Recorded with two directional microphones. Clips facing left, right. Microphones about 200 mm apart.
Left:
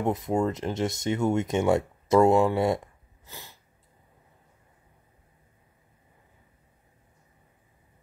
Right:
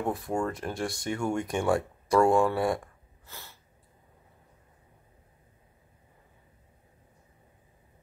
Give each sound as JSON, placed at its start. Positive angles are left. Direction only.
{"t": 0.0, "sound": "speech", "side_deg": 20}